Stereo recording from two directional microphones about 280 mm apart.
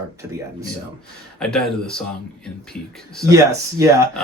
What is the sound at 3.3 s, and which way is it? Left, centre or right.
Speech, centre.